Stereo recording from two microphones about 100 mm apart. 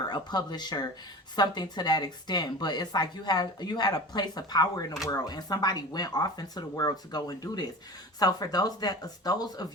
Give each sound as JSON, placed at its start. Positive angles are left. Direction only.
{"t": 0.1, "sound": "speech", "side_deg": 45}